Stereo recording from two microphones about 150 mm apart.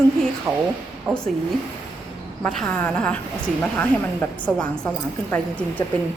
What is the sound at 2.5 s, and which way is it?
A woman's voice, 5° left (ahead or behind).